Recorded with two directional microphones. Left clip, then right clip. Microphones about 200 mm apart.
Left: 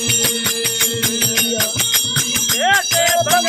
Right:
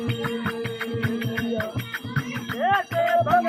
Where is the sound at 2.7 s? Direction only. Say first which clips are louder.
Left 5 dB; 30° left (ahead or behind).